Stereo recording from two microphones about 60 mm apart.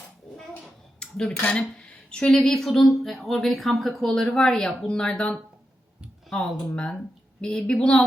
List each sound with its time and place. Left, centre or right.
0.9 s cutlery: centre
1.4 s speech: left
2.4 s speech: centre